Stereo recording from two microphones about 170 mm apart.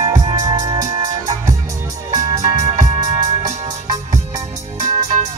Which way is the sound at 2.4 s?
45° right (ahead or behind).